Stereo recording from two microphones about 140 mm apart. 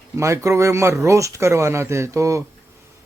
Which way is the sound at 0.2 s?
20° right (ahead or behind).